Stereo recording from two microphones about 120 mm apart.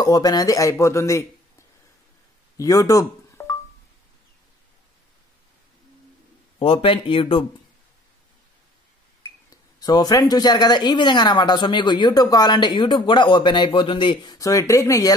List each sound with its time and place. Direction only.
0.0 s speech: 30° left (ahead or behind)
2.5 s a sound: 30° left (ahead or behind)
6.6 s speech: 50° left (ahead or behind)
9.8 s speech: 35° left (ahead or behind)